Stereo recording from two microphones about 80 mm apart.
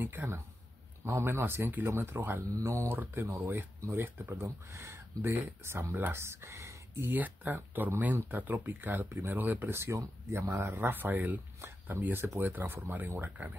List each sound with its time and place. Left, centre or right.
0.0 s speech: right